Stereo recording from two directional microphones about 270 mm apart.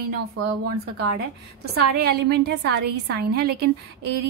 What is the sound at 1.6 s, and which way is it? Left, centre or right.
A woman's voice, right.